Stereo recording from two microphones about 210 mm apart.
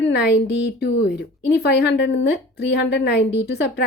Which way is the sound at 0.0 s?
50° left (ahead or behind).